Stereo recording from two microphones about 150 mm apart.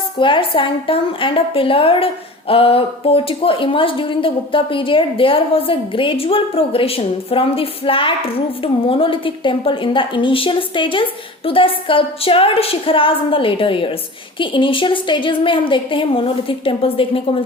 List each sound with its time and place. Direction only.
0.2 s a woman's voice: 35° left (ahead or behind)